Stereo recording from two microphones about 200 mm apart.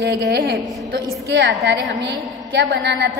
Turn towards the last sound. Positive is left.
turn(degrees=-60)  # may be behind; listen again after turning